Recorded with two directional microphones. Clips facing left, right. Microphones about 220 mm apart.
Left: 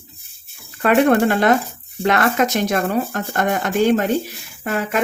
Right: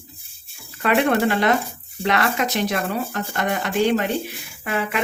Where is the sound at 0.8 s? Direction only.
45° left (ahead or behind).